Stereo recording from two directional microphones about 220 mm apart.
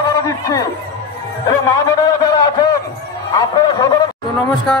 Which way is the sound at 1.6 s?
15° left (ahead or behind).